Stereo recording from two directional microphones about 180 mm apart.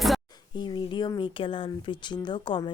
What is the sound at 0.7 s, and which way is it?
Speech, 25° left (ahead or behind).